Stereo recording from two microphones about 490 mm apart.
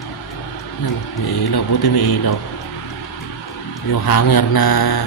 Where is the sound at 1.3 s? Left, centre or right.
Left.